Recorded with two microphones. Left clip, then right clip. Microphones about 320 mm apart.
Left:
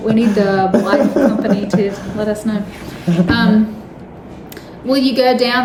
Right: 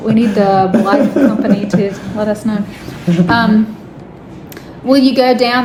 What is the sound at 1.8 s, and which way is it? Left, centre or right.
A woman's voice, centre.